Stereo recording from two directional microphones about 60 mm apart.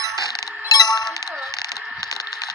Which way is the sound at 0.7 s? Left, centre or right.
Left.